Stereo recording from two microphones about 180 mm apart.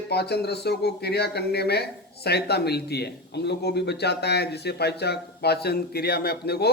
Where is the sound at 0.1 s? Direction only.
65° left (ahead or behind).